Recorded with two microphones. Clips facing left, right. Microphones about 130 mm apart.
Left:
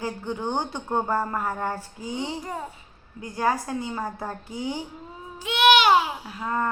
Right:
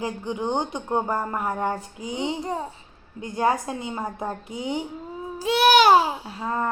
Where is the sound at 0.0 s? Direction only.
15° right (ahead or behind).